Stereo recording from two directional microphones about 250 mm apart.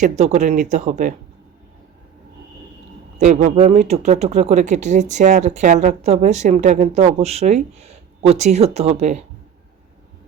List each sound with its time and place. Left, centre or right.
0.0 s speech: right
3.2 s speech: right